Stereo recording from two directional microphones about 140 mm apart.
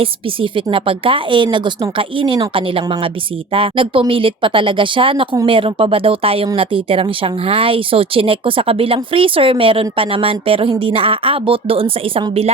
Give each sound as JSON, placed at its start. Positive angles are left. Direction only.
{"t": 0.0, "sound": "speech", "side_deg": -40}